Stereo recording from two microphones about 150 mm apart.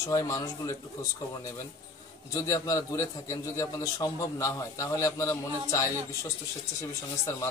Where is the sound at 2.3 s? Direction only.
25° left (ahead or behind).